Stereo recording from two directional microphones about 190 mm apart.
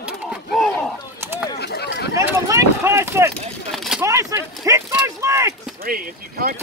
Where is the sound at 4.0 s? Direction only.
15° right (ahead or behind).